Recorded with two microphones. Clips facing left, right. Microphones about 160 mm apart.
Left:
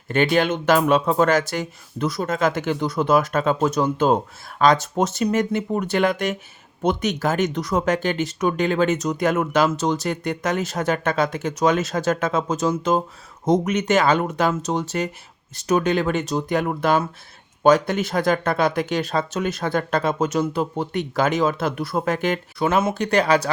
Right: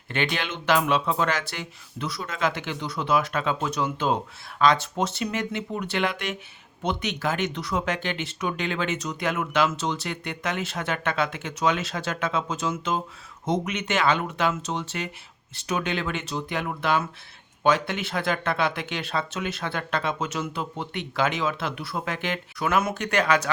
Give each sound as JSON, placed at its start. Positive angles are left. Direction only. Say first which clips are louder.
{"t": 0.1, "sound": "speech", "louder": "left 9 dB", "side_deg": 45}
{"t": 22.5, "sound": "speech", "louder": "left 3 dB", "side_deg": 30}